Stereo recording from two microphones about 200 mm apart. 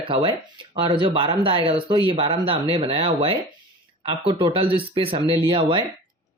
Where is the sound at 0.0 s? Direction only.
25° right (ahead or behind).